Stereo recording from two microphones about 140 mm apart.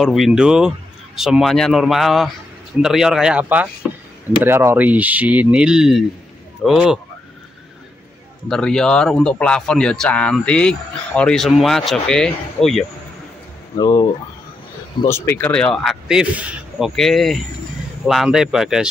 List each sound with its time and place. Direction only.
0.0 s a man's voice: centre (ahead or behind)
8.5 s a man's voice: 5° left (ahead or behind)
13.7 s speech: 25° left (ahead or behind)
15.0 s a man's voice: 20° left (ahead or behind); by 18.9 s 5° right (ahead or behind)